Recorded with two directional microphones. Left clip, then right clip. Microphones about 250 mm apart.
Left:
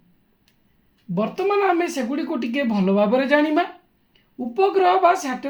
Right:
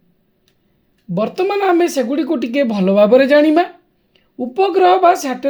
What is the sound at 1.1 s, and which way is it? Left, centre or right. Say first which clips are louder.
Speech: right 4 dB; right.